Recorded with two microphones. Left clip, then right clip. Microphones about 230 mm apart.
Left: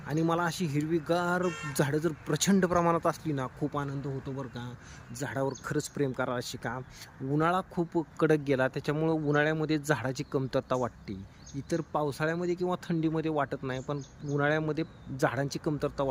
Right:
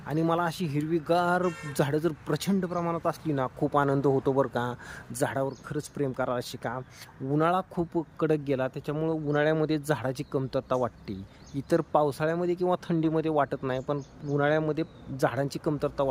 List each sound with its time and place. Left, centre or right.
0.1 s speech: centre